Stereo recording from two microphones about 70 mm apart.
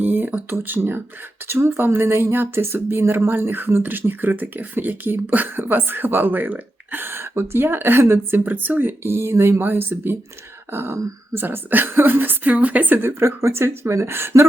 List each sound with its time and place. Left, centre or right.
0.0 s speech: right